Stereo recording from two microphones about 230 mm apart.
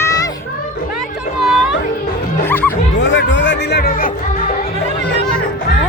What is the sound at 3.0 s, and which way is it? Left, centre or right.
Music, left.